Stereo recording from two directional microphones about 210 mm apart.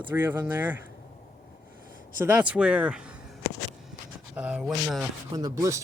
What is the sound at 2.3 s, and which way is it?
Speech, 5° right (ahead or behind).